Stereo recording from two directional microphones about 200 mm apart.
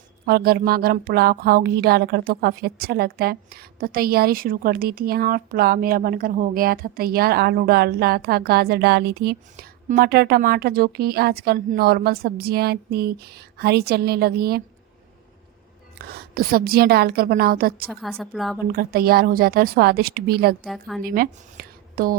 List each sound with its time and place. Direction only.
0.3 s speech: 50° right (ahead or behind)
16.0 s speech: 50° right (ahead or behind)
18.2 s a woman's voice: centre (ahead or behind)
18.7 s speech: 50° right (ahead or behind)
20.7 s a woman's voice: centre (ahead or behind)
21.0 s speech: 45° right (ahead or behind)